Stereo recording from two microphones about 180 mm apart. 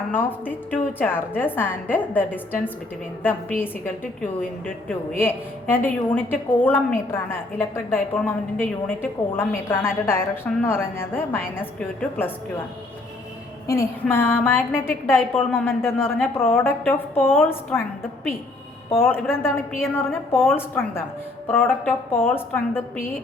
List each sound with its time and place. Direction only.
0.1 s a woman's voice: 10° left (ahead or behind)
4.4 s a woman's voice: 10° left (ahead or behind)
13.7 s a woman's voice: 15° left (ahead or behind)
18.9 s a woman's voice: 10° left (ahead or behind)